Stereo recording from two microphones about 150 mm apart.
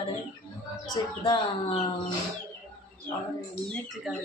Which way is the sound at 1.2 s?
35° left (ahead or behind).